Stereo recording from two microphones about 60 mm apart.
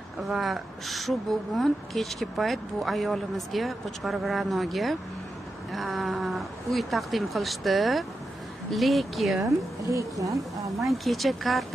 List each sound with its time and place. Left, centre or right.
0.2 s a woman's voice: centre
9.4 s a woman's voice: right
10.8 s a woman's voice: centre